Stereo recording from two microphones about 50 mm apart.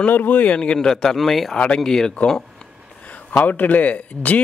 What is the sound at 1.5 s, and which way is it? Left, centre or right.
Speech, left.